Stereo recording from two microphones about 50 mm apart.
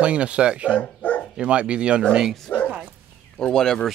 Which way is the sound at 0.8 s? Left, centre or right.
Left.